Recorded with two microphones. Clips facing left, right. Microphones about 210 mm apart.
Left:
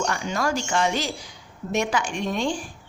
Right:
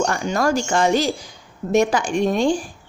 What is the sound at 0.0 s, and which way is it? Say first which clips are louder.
A woman's voice: right 6 dB; 40° right (ahead or behind).